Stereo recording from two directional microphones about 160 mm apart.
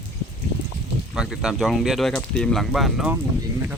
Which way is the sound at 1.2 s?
Centre (ahead or behind).